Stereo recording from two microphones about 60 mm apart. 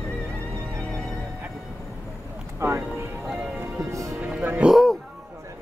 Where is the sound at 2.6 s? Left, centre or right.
Right.